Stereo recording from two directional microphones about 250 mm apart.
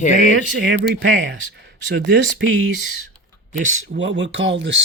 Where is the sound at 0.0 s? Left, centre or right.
Left.